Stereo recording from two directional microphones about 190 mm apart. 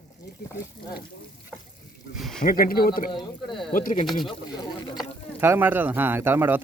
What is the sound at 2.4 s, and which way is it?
Speech, 50° left (ahead or behind).